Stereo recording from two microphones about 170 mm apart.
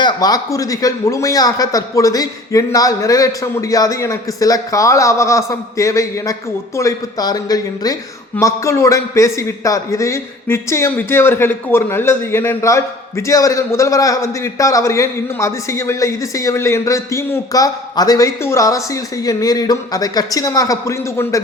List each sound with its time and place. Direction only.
0.0 s a man's voice: 25° left (ahead or behind)